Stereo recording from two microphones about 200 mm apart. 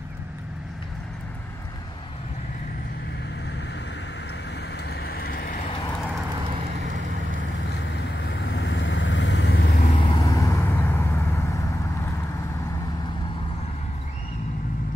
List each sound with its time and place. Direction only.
4.8 s vehicle: 55° left (ahead or behind)
8.5 s vehicle: 60° left (ahead or behind)
9.9 s vehicle: 20° left (ahead or behind)